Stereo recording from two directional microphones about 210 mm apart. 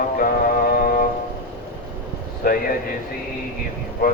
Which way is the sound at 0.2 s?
45° left (ahead or behind).